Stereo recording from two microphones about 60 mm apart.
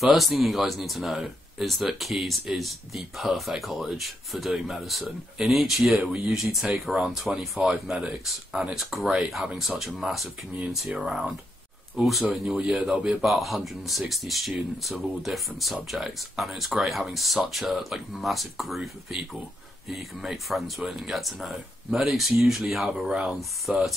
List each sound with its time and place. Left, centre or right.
0.0 s speech: centre